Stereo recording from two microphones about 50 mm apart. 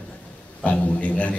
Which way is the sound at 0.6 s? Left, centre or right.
Left.